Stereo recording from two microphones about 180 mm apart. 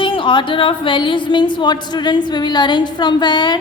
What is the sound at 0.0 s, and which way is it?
A woman's voice, 30° left (ahead or behind).